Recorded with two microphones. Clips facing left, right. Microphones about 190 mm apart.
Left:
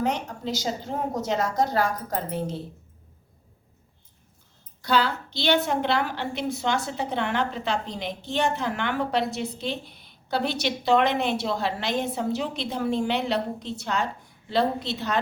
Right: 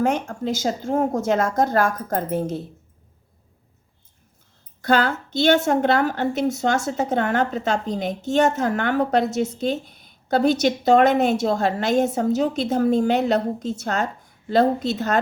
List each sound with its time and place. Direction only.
0.0 s a woman's voice: 50° right (ahead or behind)
4.8 s a woman's voice: 50° right (ahead or behind)